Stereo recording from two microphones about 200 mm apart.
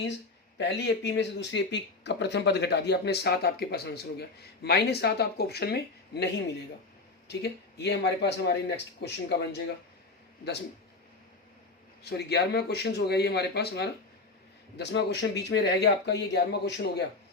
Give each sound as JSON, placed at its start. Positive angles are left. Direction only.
{"t": 0.6, "sound": "speech", "side_deg": 60}
{"t": 12.0, "sound": "speech", "side_deg": 55}